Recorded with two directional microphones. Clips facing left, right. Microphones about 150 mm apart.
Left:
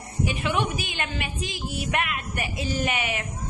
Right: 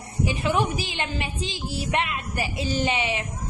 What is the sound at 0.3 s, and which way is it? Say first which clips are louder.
A woman's voice: right 3 dB; 40° right (ahead or behind).